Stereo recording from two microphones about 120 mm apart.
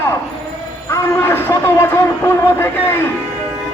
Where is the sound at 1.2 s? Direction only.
20° left (ahead or behind).